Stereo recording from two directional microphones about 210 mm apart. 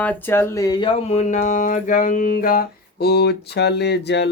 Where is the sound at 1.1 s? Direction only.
35° left (ahead or behind); by 4.3 s 55° left (ahead or behind).